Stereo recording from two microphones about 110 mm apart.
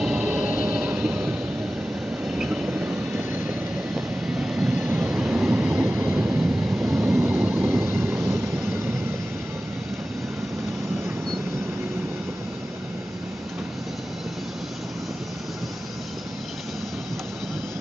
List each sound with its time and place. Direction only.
0.0 s train: 5° right (ahead or behind)
3.4 s vehicle: 5° right (ahead or behind)
4.8 s train: 10° right (ahead or behind)
5.7 s train: 20° right (ahead or behind)
6.1 s vehicle: 10° right (ahead or behind)
7.1 s train: 20° right (ahead or behind)